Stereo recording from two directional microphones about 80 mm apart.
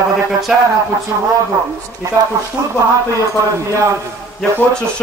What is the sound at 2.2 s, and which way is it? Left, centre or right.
Speech, right.